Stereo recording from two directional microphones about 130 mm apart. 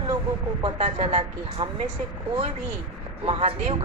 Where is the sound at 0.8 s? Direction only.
50° right (ahead or behind).